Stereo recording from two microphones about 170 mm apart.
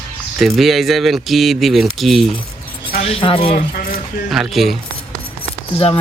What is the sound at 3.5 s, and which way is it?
Speech, 55° left (ahead or behind).